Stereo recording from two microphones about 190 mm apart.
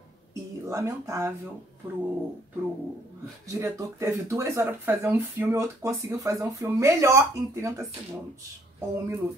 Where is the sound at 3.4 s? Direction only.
15° right (ahead or behind).